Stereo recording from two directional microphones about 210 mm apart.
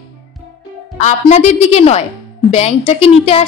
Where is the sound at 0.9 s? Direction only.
35° left (ahead or behind).